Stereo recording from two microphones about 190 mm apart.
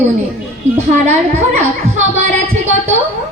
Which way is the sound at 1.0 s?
40° right (ahead or behind).